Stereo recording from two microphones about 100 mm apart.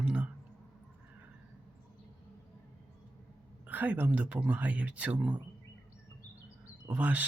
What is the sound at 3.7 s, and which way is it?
Speech, 15° right (ahead or behind).